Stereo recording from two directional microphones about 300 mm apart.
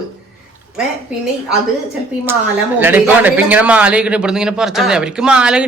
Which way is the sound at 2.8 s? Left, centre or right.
Centre.